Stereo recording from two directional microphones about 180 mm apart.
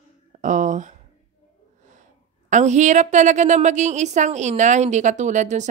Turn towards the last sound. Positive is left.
turn(degrees=-40)  # may be behind; listen again after turning